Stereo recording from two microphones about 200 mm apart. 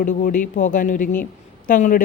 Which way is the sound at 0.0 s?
40° left (ahead or behind).